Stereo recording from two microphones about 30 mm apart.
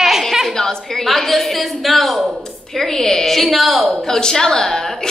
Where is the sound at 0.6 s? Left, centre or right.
Centre.